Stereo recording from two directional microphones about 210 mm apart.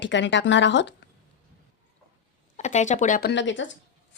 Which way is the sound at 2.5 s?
35° left (ahead or behind).